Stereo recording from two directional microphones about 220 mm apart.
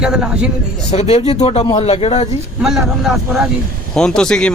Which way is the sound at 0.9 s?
30° left (ahead or behind).